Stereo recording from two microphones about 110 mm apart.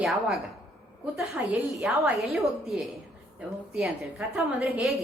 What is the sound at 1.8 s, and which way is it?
A woman's voice, 5° right (ahead or behind).